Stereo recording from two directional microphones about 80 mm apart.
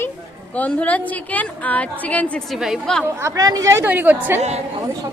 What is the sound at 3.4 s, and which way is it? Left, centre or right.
Speech, right.